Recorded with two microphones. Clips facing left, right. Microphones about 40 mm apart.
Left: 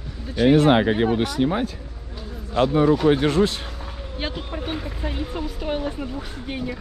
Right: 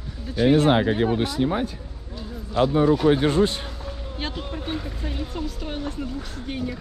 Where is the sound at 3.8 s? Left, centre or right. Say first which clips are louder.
Left 3 dB; centre.